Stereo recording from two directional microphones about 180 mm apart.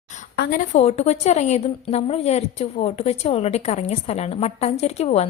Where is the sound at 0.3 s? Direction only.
50° left (ahead or behind).